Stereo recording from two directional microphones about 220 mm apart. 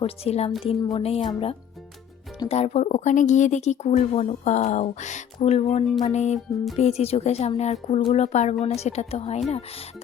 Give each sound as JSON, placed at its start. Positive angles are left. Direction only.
{"t": 0.0, "sound": "a woman's voice", "side_deg": 25}